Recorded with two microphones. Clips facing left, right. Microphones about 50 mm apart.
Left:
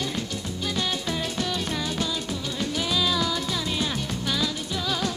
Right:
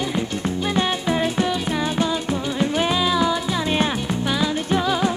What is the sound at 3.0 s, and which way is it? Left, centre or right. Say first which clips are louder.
Music: right 6 dB; right.